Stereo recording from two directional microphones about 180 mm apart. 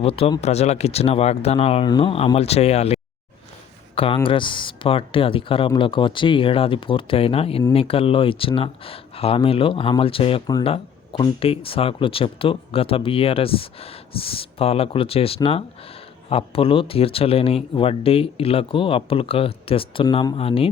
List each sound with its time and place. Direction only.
0.0 s speech: 30° left (ahead or behind)